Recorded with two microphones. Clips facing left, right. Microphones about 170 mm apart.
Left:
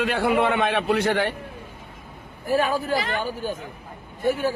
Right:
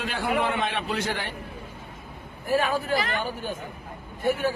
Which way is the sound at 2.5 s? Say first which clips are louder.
Left 2 dB; 40° left (ahead or behind).